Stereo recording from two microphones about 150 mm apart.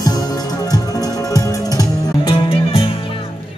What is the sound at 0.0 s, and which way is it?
Music, 25° left (ahead or behind).